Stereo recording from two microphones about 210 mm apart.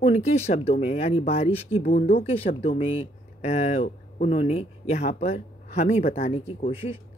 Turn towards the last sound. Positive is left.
turn(degrees=30)  # may be behind; listen again after turning